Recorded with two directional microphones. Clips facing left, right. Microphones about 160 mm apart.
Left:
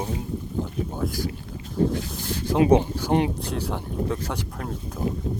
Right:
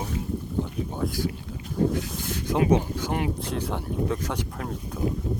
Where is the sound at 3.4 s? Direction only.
Centre (ahead or behind).